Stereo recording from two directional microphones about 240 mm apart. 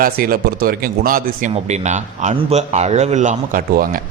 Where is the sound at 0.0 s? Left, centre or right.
Right.